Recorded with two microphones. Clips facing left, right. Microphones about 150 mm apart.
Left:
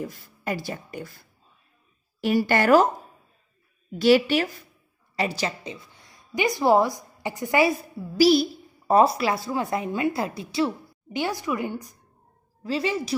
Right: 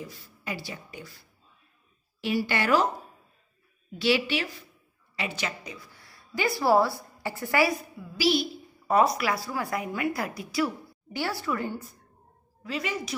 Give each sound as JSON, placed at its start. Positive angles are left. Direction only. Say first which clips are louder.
{"t": 0.0, "sound": "speech", "louder": "left 7 dB", "side_deg": 50}
{"t": 2.2, "sound": "speech", "louder": "left 6 dB", "side_deg": 50}
{"t": 3.9, "sound": "a woman's voice", "louder": "left 7 dB", "side_deg": 45}
{"t": 8.0, "sound": "a woman's voice", "louder": "left 8 dB", "side_deg": 40}
{"t": 12.6, "sound": "a woman's voice", "louder": "left 6 dB", "side_deg": 30}